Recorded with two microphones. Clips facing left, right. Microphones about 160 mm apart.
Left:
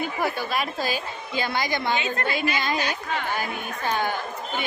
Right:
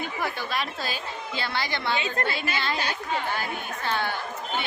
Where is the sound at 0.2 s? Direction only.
10° left (ahead or behind).